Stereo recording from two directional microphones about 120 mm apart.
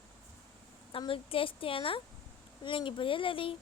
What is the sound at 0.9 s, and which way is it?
A woman's voice, 50° left (ahead or behind).